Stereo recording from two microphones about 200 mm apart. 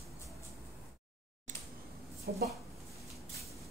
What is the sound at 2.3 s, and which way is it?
Speech, 55° right (ahead or behind).